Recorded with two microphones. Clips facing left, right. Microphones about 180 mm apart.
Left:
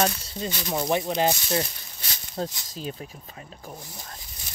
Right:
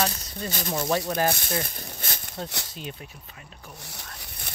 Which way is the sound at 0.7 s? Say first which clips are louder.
Left 1 dB; 15° left (ahead or behind).